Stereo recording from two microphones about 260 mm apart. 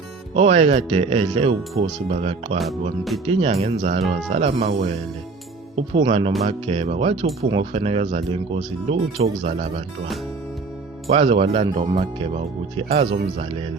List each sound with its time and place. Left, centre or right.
0.3 s speech: right
11.1 s speech: right